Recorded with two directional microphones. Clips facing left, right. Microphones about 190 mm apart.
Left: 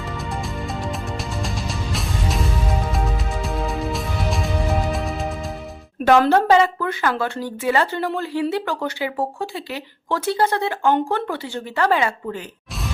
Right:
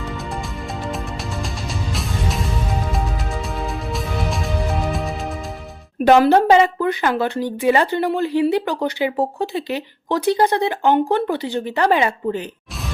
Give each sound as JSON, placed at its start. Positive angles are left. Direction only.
{"t": 1.9, "sound": "music", "side_deg": 0}
{"t": 6.1, "sound": "a woman's voice", "side_deg": -15}